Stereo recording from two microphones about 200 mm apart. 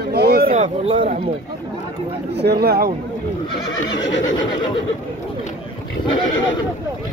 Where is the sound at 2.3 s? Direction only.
55° right (ahead or behind).